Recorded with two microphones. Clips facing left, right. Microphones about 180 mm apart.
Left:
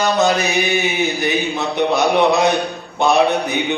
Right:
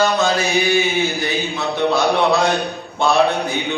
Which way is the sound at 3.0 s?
20° left (ahead or behind).